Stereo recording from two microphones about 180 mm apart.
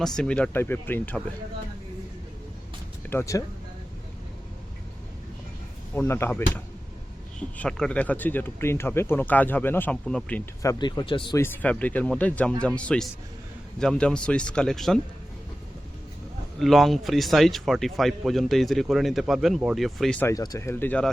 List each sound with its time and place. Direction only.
0.0 s speech: 5° left (ahead or behind)
3.1 s speech: 15° left (ahead or behind)
5.9 s speech: 10° left (ahead or behind); by 11.3 s 30° left (ahead or behind)
11.3 s speech: 10° left (ahead or behind)
16.6 s speech: centre (ahead or behind)
20.3 s speech: 20° left (ahead or behind)